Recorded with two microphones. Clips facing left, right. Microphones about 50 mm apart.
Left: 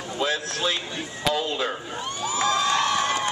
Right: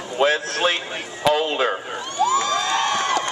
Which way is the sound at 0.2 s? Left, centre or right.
Right.